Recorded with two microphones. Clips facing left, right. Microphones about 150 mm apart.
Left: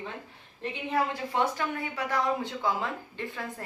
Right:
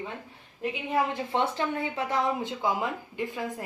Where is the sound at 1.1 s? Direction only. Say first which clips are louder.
Right 1 dB; 25° right (ahead or behind).